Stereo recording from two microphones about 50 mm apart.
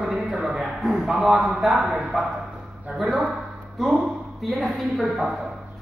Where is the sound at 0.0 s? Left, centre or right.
Centre.